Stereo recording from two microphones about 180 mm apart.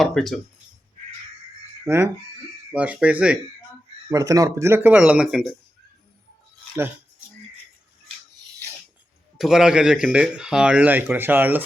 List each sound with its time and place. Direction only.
0.0 s speech: centre (ahead or behind)
1.8 s speech: 15° right (ahead or behind)
4.1 s speech: 20° right (ahead or behind); by 5.5 s centre (ahead or behind)
9.4 s speech: centre (ahead or behind)